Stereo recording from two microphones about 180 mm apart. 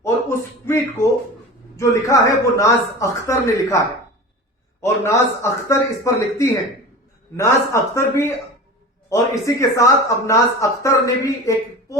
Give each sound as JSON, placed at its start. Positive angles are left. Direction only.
{"t": 0.0, "sound": "speech", "side_deg": 15}
{"t": 4.8, "sound": "speech", "side_deg": 15}